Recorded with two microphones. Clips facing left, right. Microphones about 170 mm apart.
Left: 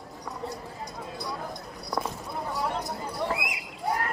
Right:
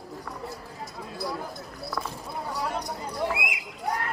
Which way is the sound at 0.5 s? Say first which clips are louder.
Left 1 dB; centre (ahead or behind).